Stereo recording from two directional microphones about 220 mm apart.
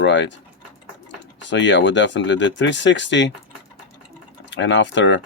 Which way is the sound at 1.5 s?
55° left (ahead or behind).